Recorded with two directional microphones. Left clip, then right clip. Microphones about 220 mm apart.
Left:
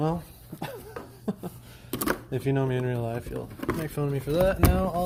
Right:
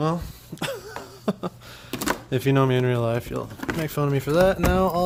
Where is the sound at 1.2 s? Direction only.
25° right (ahead or behind).